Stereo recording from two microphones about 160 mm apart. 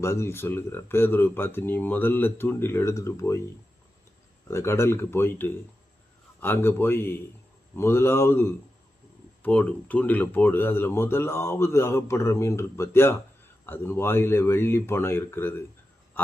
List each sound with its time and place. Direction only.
0.0 s speech: 15° left (ahead or behind)
4.4 s speech: 15° left (ahead or behind)